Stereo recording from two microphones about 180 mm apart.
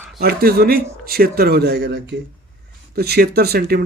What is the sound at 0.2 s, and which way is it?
A man's voice, 60° right (ahead or behind).